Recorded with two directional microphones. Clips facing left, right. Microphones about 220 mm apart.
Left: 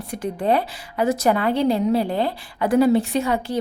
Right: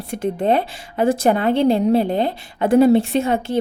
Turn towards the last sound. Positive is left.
turn(degrees=-25)  # may be behind; listen again after turning